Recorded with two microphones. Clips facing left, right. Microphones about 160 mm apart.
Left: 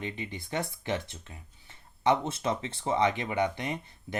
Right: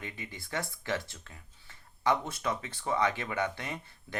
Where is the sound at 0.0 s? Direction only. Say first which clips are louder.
Left 6 dB; 20° left (ahead or behind).